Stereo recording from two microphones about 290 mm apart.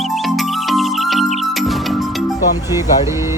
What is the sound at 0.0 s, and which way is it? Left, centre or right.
Music, centre.